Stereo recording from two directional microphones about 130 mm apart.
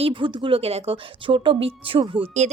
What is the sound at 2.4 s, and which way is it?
Speech, 60° right (ahead or behind).